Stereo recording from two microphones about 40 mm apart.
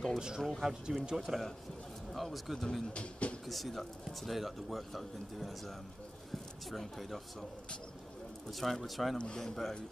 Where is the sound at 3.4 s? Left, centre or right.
Centre.